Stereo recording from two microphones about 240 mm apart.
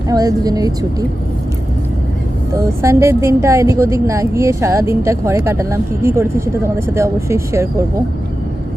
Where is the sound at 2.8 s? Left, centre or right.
Centre.